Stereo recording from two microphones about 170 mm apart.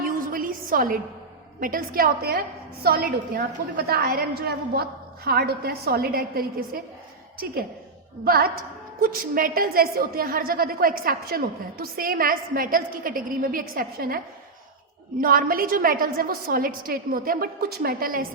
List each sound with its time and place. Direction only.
0.0 s a sound: 55° right (ahead or behind)
1.6 s a woman's voice: 55° right (ahead or behind)
8.2 s a woman's voice: 60° right (ahead or behind)
15.2 s a woman's voice: 55° right (ahead or behind)